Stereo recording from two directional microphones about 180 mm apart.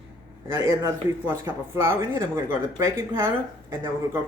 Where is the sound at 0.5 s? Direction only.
15° right (ahead or behind).